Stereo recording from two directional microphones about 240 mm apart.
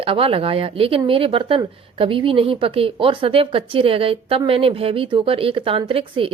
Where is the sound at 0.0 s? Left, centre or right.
Right.